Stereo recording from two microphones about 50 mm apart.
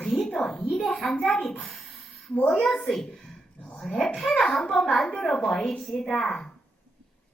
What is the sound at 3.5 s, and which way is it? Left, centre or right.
Dog, left.